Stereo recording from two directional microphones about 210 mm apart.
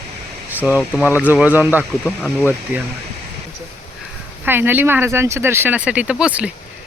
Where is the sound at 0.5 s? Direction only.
5° right (ahead or behind).